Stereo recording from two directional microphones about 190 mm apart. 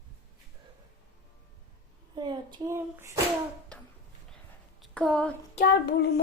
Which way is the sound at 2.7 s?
15° right (ahead or behind).